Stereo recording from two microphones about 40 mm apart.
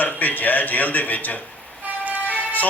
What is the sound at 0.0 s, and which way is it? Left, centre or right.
Speech, left.